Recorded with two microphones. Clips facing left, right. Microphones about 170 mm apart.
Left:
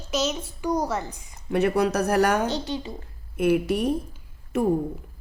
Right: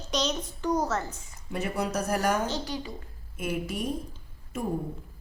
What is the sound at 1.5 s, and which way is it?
Speech, 70° left (ahead or behind).